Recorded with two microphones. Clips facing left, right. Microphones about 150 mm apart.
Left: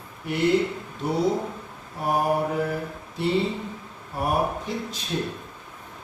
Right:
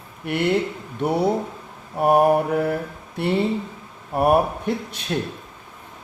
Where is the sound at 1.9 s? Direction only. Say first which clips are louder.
Right 8 dB; 60° right (ahead or behind).